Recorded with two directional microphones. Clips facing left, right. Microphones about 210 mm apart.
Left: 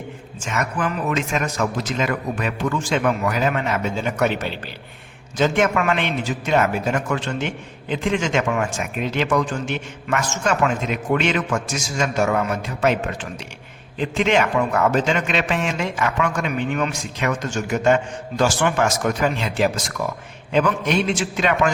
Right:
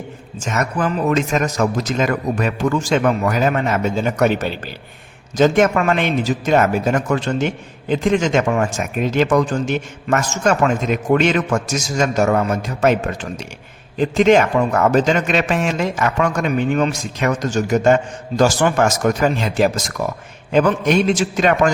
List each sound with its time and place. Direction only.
0.3 s a man's voice: 40° right (ahead or behind)
14.0 s a man's voice: 40° right (ahead or behind)